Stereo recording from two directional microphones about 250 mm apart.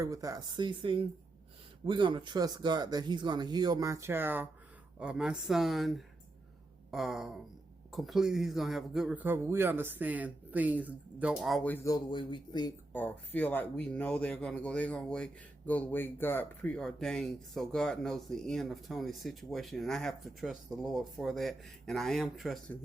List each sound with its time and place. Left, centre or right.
0.0 s speech: centre
12.9 s speech: centre